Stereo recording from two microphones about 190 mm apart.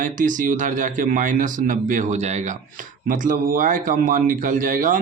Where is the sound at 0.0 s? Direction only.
45° right (ahead or behind).